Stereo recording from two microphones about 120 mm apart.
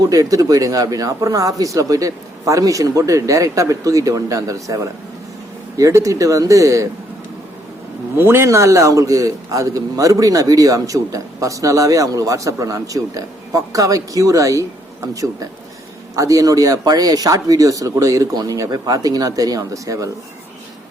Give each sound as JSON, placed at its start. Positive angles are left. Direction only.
{"t": 0.0, "sound": "a man's voice", "side_deg": -30}
{"t": 8.1, "sound": "a man's voice", "side_deg": -20}